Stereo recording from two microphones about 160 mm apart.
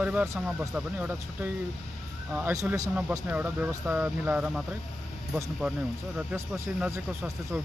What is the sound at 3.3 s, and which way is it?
Speech, 10° right (ahead or behind).